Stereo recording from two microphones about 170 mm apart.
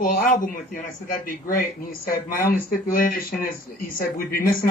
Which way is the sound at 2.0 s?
55° left (ahead or behind).